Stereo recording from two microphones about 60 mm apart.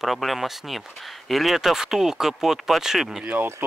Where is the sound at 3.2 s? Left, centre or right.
Right.